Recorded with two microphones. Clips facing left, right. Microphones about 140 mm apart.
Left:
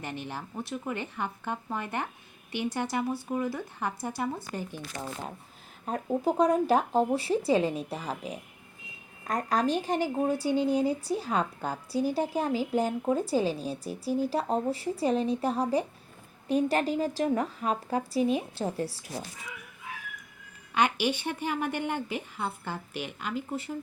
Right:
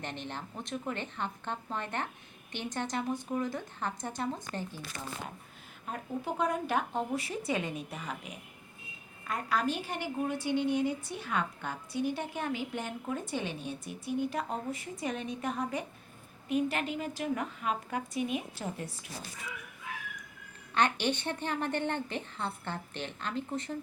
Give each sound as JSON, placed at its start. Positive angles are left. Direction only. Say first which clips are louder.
{"t": 0.0, "sound": "a woman's voice", "louder": "left 3 dB", "side_deg": 10}
{"t": 5.8, "sound": "a woman's voice", "louder": "left 9 dB", "side_deg": 35}
{"t": 20.7, "sound": "a woman's voice", "louder": "left 2 dB", "side_deg": 10}